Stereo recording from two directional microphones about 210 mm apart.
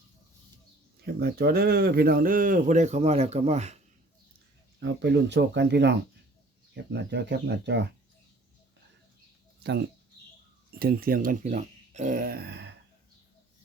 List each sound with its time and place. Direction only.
1.0 s speech: 45° right (ahead or behind); by 3.8 s 30° right (ahead or behind)
4.8 s speech: 55° right (ahead or behind)
10.7 s speech: 45° right (ahead or behind)